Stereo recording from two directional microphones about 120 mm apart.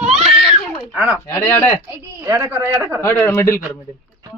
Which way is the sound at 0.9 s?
10° right (ahead or behind).